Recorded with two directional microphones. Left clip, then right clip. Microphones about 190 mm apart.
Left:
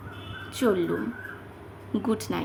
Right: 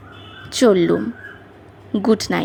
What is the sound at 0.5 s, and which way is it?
A woman's voice, 30° right (ahead or behind).